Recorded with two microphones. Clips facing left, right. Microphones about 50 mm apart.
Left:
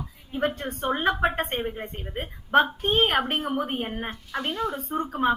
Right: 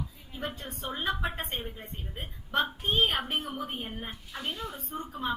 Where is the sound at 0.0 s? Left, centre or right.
Left.